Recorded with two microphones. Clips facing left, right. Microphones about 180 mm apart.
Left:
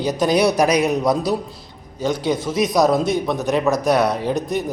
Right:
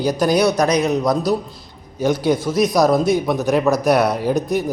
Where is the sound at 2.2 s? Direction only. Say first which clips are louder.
Right 3 dB; 20° left (ahead or behind).